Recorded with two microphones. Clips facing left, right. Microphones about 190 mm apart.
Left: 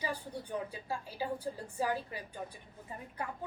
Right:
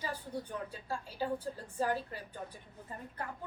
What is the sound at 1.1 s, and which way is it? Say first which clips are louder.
A woman's voice: right 2 dB; 10° left (ahead or behind).